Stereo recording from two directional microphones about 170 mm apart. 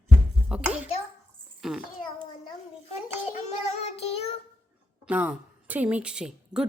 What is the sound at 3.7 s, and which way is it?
Child singing, 40° left (ahead or behind).